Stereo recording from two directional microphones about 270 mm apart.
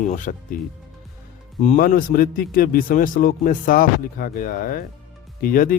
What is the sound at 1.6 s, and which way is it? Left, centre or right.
Speech, left.